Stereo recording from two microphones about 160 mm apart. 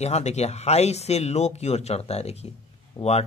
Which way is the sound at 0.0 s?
45° left (ahead or behind).